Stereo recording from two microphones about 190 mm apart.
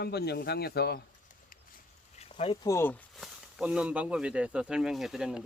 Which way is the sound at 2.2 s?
30° left (ahead or behind).